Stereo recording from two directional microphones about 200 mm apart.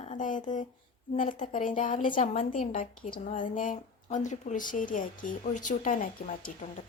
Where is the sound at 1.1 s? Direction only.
40° left (ahead or behind).